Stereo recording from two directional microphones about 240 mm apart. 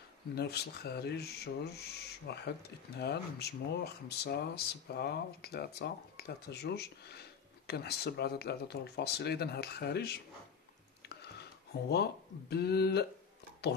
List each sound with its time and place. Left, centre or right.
0.4 s speech: left
11.9 s speech: left